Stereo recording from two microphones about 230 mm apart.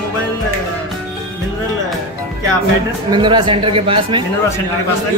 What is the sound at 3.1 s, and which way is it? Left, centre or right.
A man's voice, right.